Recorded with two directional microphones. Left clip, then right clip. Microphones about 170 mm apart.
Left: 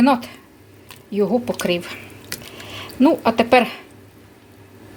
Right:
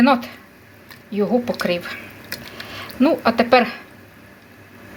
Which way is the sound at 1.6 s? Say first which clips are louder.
Even; 20° left (ahead or behind).